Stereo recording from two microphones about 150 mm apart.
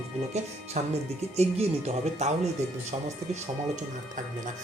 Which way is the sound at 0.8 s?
50° right (ahead or behind).